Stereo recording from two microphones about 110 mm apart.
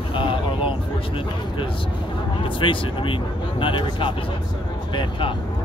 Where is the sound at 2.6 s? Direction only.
50° left (ahead or behind).